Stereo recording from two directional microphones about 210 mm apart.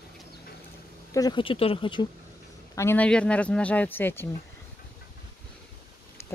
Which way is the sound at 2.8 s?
10° left (ahead or behind).